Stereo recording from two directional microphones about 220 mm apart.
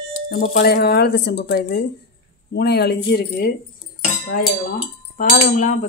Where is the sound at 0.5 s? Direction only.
50° left (ahead or behind).